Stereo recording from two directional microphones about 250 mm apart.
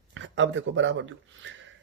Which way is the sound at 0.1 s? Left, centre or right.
Right.